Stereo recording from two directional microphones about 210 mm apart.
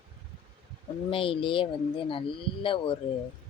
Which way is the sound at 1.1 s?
25° left (ahead or behind).